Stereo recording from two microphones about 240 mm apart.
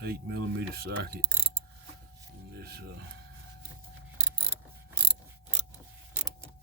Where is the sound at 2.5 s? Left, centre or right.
Right.